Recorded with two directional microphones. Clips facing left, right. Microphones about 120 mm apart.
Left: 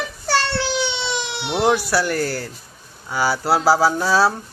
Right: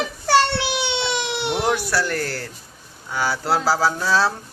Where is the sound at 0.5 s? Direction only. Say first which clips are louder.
Left 1 dB; 60° right (ahead or behind).